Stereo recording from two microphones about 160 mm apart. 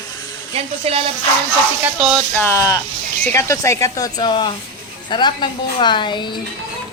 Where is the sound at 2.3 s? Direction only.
15° left (ahead or behind).